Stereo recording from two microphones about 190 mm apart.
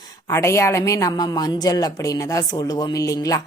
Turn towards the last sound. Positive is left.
turn(degrees=20)  # may be behind; listen again after turning